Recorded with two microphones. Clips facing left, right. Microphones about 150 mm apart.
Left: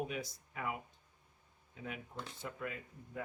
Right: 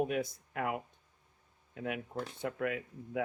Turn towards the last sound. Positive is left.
turn(degrees=-75)  # may be behind; listen again after turning